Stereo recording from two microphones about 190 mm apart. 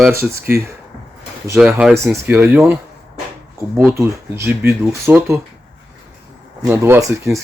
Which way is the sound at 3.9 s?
15° right (ahead or behind).